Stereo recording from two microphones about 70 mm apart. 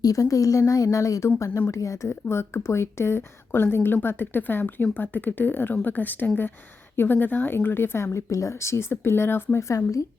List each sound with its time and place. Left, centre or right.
0.0 s a woman's voice: left
2.3 s a woman's voice: left